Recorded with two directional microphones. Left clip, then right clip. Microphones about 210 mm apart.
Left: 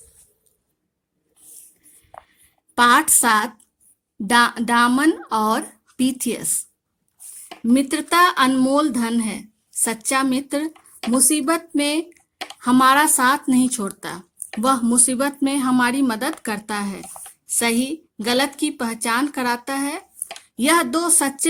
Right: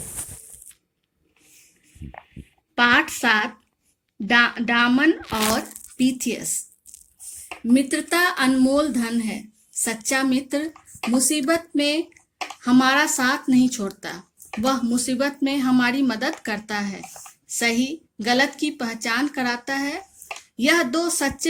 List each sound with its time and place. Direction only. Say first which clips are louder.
2.7 s a woman's voice: left 3 dB; 50° left (ahead or behind)
5.5 s speech: left 1 dB; 40° left (ahead or behind)
7.7 s a woman's voice: left 2 dB; 45° left (ahead or behind)